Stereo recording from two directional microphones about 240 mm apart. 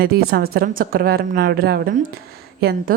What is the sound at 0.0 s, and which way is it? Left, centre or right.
A woman's voice, right.